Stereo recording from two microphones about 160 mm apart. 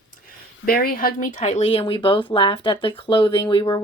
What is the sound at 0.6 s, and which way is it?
Speech, 70° left (ahead or behind).